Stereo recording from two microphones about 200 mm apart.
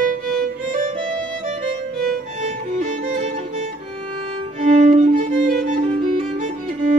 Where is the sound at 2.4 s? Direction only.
35° right (ahead or behind).